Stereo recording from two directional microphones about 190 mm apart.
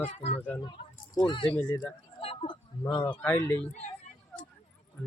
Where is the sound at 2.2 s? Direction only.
30° left (ahead or behind).